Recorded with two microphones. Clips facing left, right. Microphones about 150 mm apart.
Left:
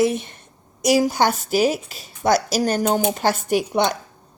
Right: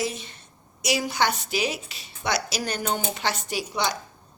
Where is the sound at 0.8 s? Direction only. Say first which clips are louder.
Left 7 dB; 45° left (ahead or behind).